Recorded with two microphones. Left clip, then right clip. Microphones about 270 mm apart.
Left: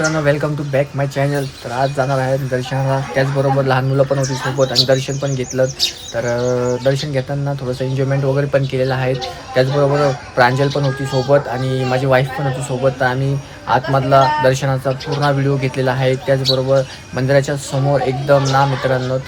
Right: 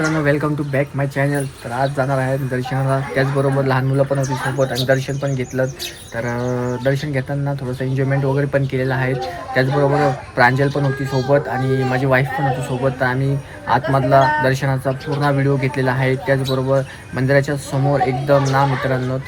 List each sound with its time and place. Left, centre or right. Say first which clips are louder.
0.0 s speech: left 2 dB; centre